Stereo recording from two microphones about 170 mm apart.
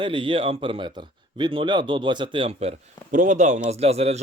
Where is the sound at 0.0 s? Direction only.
30° right (ahead or behind).